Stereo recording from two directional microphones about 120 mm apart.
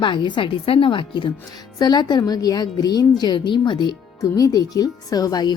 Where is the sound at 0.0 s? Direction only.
40° left (ahead or behind).